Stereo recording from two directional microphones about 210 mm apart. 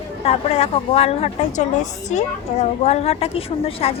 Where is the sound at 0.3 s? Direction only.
30° left (ahead or behind).